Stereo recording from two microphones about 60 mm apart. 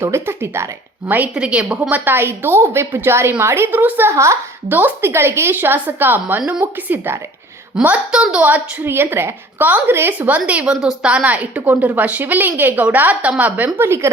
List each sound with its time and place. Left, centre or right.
0.0 s a woman's voice: right
1.0 s a woman's voice: right
1.4 s a woman's voice: centre
2.0 s a woman's voice: right
3.7 s a woman's voice: right
4.1 s a woman's voice: right
4.7 s a woman's voice: right
5.1 s a woman's voice: right
7.8 s a woman's voice: right
8.4 s a woman's voice: right
9.9 s a woman's voice: right
10.2 s a woman's voice: right
13.7 s a woman's voice: right